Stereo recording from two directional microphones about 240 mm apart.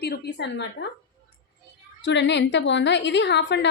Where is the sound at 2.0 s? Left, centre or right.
Left.